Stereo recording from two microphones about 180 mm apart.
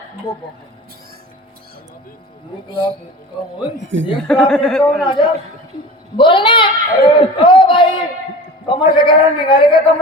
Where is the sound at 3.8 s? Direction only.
90° right.